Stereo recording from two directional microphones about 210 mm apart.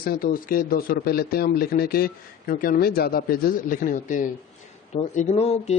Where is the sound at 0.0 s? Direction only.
45° left (ahead or behind).